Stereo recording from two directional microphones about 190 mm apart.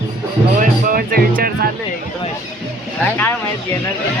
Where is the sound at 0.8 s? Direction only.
50° right (ahead or behind).